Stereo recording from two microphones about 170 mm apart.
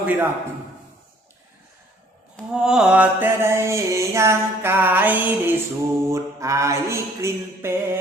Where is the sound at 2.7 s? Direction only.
5° right (ahead or behind).